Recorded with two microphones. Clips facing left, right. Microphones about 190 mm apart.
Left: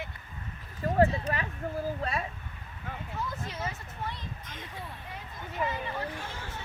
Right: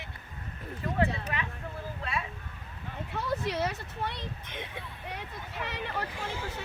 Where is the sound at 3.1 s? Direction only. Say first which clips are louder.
Right 7 dB; 75° right (ahead or behind).